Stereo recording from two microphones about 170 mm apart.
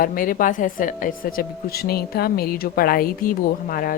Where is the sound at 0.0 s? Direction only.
55° left (ahead or behind).